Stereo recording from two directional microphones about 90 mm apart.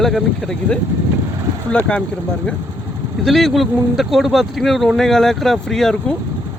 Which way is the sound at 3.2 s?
Centre (ahead or behind).